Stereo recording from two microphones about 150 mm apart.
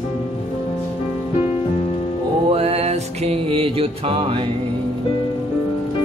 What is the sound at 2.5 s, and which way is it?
Music, 45° right (ahead or behind).